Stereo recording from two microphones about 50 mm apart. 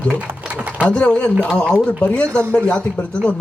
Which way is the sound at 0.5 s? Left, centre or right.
Right.